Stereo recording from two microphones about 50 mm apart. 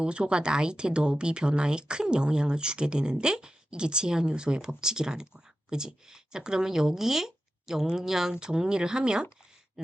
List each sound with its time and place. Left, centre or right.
0.0 s speech: right